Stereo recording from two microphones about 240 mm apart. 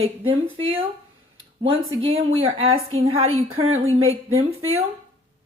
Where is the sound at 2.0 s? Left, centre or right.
Right.